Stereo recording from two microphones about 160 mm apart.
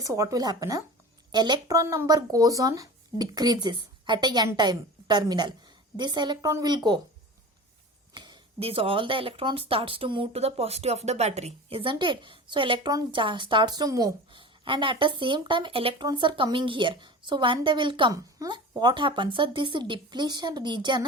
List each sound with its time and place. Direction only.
0.0 s speech: 20° right (ahead or behind)
8.1 s speech: 30° right (ahead or behind)